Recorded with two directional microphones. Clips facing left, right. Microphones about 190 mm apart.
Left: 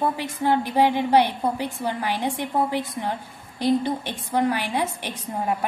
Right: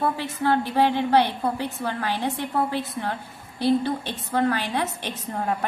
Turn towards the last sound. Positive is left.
turn(degrees=10)  # may be behind; listen again after turning